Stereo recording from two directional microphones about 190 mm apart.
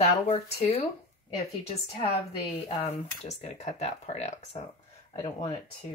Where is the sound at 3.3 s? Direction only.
35° left (ahead or behind).